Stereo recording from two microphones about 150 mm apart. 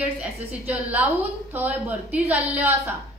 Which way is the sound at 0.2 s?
10° right (ahead or behind).